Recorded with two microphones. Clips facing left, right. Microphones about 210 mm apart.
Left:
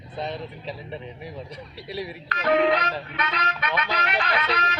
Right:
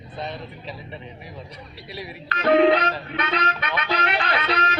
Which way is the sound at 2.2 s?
30° right (ahead or behind).